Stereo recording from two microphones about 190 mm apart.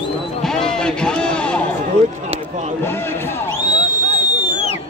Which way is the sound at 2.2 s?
35° right (ahead or behind).